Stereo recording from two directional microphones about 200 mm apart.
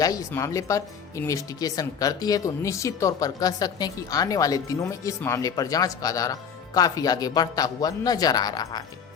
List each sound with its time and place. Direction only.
0.0 s speech: 15° left (ahead or behind)